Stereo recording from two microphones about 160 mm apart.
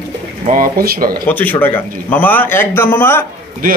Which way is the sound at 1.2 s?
10° left (ahead or behind).